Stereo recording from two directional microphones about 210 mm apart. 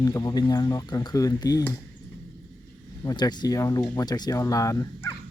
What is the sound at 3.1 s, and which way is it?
Speech, 20° left (ahead or behind).